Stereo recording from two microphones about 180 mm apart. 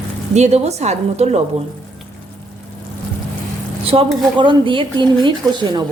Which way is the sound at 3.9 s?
30° right (ahead or behind).